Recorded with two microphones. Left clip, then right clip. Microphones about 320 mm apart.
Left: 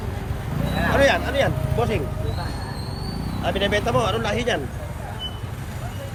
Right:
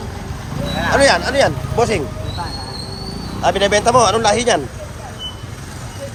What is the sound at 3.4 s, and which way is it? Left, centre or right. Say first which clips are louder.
Speech: right 8 dB; centre.